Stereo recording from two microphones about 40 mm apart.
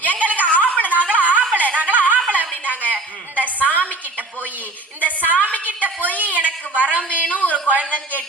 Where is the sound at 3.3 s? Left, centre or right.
Left.